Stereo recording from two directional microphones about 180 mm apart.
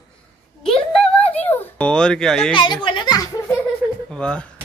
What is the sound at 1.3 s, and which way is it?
Dog, 10° left (ahead or behind).